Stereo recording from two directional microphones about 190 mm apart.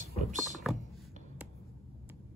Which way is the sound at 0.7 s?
Centre (ahead or behind).